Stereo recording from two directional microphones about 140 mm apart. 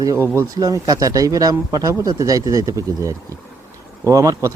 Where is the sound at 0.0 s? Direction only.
20° right (ahead or behind).